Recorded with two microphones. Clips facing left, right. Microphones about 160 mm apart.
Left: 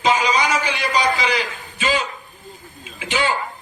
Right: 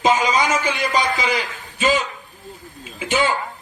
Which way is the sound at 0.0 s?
45° right (ahead or behind).